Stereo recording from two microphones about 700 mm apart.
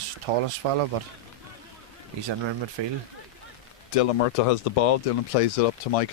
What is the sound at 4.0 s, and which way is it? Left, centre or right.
Speech, left.